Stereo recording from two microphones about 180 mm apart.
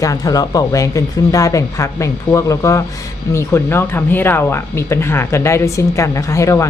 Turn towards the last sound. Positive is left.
turn(degrees=15)  # may be behind; listen again after turning